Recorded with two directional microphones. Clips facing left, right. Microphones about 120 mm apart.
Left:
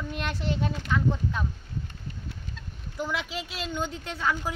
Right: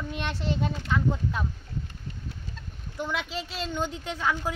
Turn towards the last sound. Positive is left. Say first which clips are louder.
# right 1 dB
turn(degrees=0)  # may be behind; listen again after turning